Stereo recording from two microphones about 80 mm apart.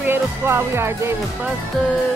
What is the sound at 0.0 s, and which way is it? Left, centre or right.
Speech, right.